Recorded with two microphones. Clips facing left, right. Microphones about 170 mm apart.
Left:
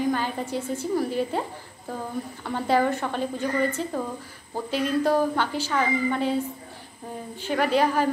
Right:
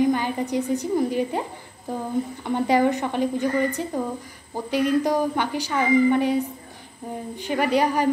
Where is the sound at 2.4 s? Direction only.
15° right (ahead or behind).